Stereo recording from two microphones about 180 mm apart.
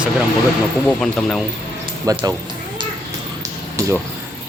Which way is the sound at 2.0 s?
20° right (ahead or behind).